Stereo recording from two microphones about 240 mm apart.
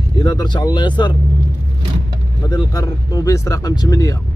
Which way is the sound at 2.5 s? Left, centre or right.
Centre.